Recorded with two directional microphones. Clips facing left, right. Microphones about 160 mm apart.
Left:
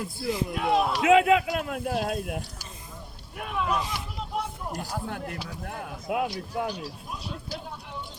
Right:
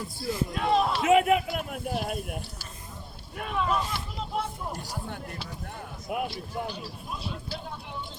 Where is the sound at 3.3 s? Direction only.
5° left (ahead or behind).